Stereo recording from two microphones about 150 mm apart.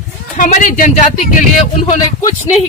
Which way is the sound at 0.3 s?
60° left (ahead or behind).